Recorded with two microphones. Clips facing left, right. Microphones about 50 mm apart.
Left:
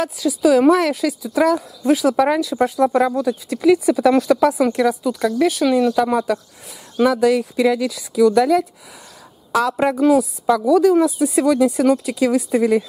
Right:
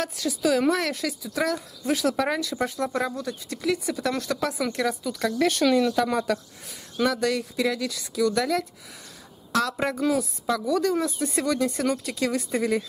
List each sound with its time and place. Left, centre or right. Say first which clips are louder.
0.0 s speech: left 8 dB; centre
10.1 s speech: left 10 dB; centre